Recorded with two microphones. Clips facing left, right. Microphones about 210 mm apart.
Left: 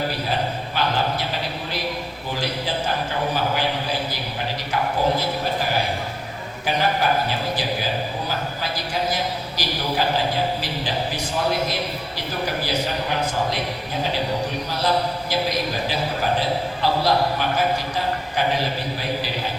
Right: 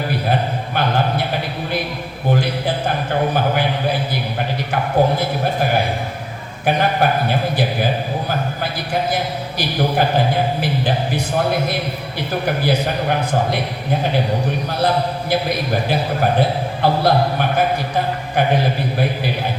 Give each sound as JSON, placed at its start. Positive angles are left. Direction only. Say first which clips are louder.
{"t": 0.8, "sound": "a sound", "louder": "right 4 dB", "side_deg": -55}
{"t": 2.3, "sound": "a man's voice", "louder": "right 6 dB", "side_deg": -55}
{"t": 14.7, "sound": "a man's voice", "louder": "right 3 dB", "side_deg": -55}